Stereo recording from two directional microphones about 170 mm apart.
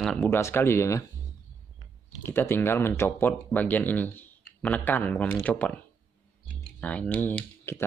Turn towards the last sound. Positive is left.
turn(degrees=10)  # may be behind; listen again after turning